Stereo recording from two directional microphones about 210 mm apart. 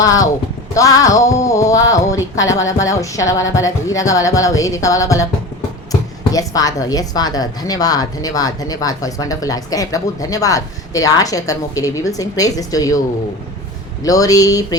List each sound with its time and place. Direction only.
0.0 s speech: 15° left (ahead or behind)
14.0 s speech: 15° left (ahead or behind)